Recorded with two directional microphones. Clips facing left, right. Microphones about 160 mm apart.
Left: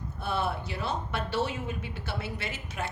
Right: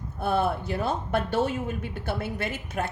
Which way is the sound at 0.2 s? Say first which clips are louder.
Right 6 dB; 50° right (ahead or behind).